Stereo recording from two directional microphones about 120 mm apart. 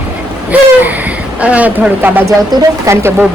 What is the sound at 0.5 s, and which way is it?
Speech, 15° right (ahead or behind).